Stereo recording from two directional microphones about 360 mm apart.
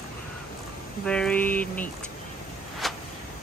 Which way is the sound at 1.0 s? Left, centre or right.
Centre.